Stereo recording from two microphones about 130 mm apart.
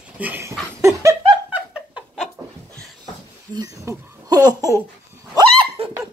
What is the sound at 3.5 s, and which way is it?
Babbling, 25° right (ahead or behind).